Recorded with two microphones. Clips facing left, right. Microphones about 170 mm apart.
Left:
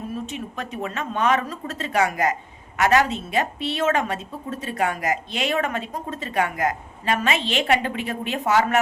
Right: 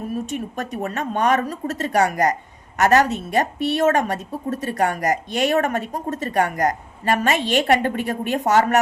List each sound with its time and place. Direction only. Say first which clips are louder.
0.3 s a woman's voice: right 4 dB; 45° right (ahead or behind)